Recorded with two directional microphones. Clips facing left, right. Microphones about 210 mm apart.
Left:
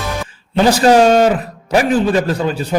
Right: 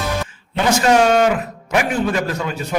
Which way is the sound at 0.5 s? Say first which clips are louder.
Left 5 dB; 35° left (ahead or behind).